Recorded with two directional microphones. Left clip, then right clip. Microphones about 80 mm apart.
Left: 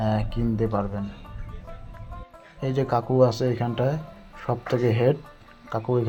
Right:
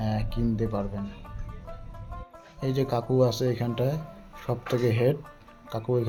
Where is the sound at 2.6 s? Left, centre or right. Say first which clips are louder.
Left 3 dB; left.